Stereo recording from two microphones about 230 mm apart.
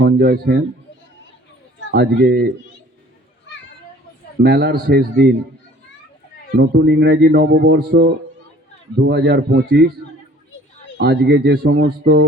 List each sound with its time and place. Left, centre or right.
0.0 s speech: right
1.9 s speech: right
4.4 s speech: right
6.6 s speech: right
10.9 s speech: right